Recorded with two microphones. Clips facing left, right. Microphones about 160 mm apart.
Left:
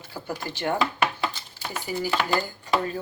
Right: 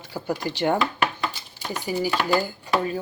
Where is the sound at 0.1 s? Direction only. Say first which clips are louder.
Right 5 dB; 15° right (ahead or behind).